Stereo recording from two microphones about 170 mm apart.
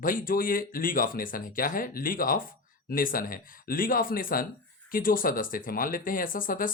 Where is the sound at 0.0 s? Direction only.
55° left (ahead or behind).